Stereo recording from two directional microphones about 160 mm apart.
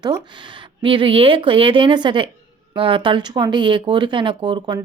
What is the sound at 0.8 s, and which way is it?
Speech, 30° right (ahead or behind).